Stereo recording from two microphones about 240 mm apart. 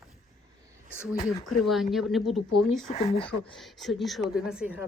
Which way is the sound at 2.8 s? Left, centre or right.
Left.